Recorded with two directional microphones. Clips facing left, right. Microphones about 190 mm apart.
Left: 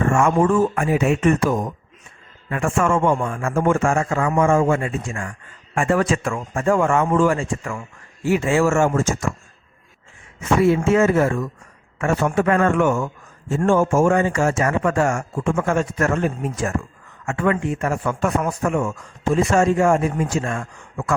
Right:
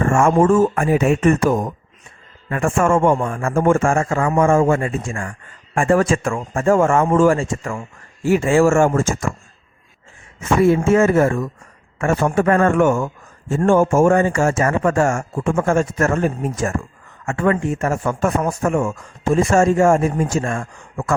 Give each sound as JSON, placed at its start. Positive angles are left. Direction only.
{"t": 0.0, "sound": "speech", "side_deg": -50}
{"t": 7.6, "sound": "a man's voice", "side_deg": -30}
{"t": 8.2, "sound": "speech", "side_deg": -45}
{"t": 10.8, "sound": "a man's voice", "side_deg": -50}
{"t": 19.2, "sound": "speech", "side_deg": -45}